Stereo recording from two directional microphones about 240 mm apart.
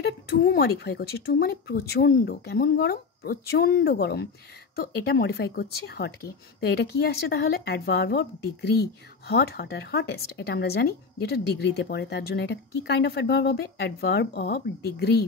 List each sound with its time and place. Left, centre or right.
0.0 s speech: left